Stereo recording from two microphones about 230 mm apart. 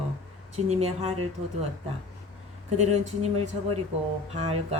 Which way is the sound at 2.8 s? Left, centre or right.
Right.